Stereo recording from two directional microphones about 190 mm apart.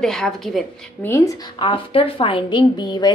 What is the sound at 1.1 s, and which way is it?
A woman's voice, 15° left (ahead or behind).